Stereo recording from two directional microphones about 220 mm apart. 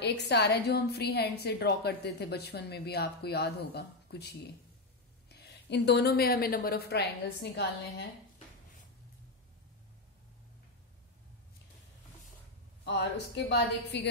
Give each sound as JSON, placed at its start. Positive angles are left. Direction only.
{"t": 0.0, "sound": "a woman's voice", "side_deg": 50}
{"t": 13.5, "sound": "a woman's voice", "side_deg": 50}